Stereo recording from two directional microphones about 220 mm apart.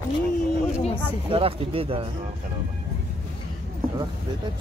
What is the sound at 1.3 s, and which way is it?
Speech, 25° right (ahead or behind).